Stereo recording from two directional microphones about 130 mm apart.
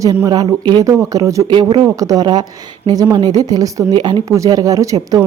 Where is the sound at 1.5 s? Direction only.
35° right (ahead or behind).